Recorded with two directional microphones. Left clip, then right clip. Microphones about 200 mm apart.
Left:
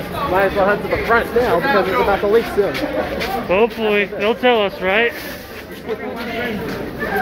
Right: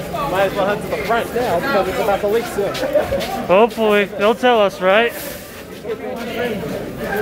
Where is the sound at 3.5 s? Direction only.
25° right (ahead or behind).